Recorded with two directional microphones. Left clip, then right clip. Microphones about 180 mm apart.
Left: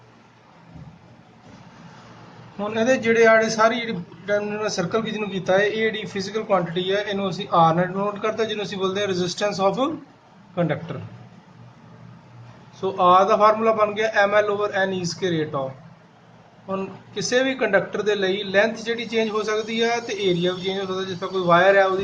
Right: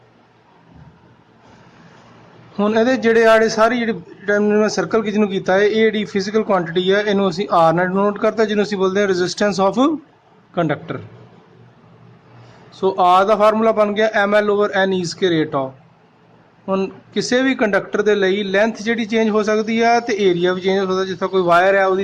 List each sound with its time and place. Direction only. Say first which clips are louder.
2.6 s a man's voice: right 5 dB; 50° right (ahead or behind)
12.8 s a man's voice: right 3 dB; 45° right (ahead or behind)
16.6 s a man's voice: right 8 dB; 45° right (ahead or behind)